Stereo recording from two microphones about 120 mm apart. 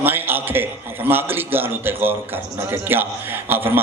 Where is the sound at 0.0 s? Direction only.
15° right (ahead or behind).